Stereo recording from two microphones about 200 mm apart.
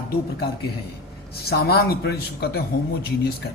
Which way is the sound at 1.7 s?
50° left (ahead or behind).